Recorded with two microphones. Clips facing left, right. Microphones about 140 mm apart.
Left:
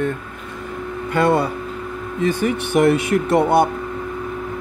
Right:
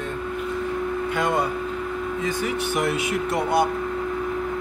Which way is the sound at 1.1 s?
75° left (ahead or behind).